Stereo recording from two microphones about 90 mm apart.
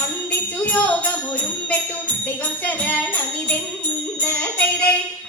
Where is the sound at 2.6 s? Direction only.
15° left (ahead or behind).